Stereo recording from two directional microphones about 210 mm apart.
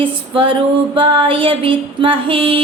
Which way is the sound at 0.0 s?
25° right (ahead or behind).